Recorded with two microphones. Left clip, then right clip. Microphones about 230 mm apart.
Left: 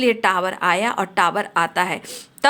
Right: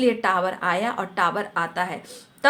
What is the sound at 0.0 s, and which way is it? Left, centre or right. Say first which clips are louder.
Speech: left 3 dB; left.